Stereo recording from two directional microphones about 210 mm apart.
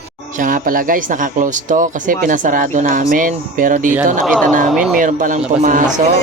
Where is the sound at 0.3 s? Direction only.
40° right (ahead or behind).